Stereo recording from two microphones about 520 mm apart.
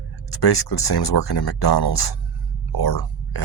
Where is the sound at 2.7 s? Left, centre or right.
Left.